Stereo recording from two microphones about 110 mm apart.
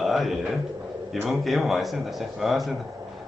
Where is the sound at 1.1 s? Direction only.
Centre (ahead or behind).